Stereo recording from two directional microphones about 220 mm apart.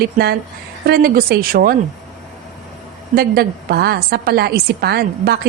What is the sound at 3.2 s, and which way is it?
A woman's voice, 45° right (ahead or behind).